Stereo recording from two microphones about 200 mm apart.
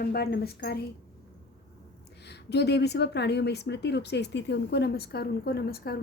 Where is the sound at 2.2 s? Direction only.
55° left (ahead or behind).